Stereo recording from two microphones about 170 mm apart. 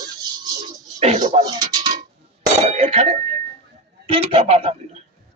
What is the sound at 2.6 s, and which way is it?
Speech, 35° right (ahead or behind).